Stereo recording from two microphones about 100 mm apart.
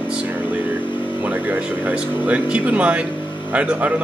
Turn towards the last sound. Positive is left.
turn(degrees=-15)  # may be behind; listen again after turning